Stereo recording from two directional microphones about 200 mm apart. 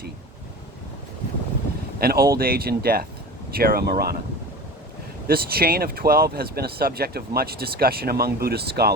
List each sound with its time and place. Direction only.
2.0 s speech: 50° right (ahead or behind)
5.3 s speech: 50° right (ahead or behind)